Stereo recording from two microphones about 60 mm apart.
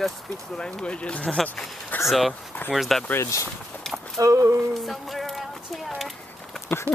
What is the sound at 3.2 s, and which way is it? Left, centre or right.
Speech, left.